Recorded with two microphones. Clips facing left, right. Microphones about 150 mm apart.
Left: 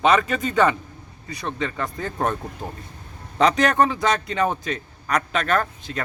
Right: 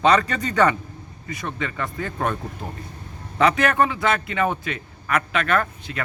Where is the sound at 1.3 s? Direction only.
35° left (ahead or behind).